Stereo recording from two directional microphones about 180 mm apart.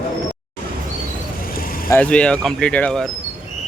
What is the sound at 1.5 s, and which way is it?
Vehicle, 50° left (ahead or behind).